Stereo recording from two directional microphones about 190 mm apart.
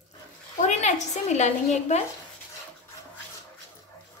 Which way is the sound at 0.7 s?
40° left (ahead or behind).